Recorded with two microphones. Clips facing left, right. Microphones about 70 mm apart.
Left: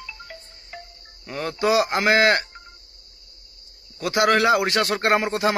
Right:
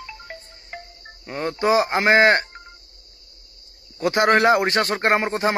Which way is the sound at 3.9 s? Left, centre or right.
Right.